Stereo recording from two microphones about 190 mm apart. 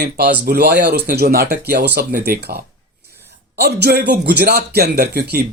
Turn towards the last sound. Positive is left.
turn(degrees=-55)  # may be behind; listen again after turning